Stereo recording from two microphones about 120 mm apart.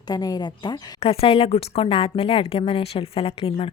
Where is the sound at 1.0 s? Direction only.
55° left (ahead or behind).